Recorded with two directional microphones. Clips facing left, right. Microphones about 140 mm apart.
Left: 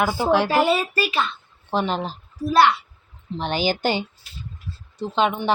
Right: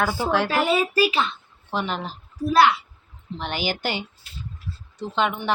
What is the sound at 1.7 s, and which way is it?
Speech, 30° left (ahead or behind).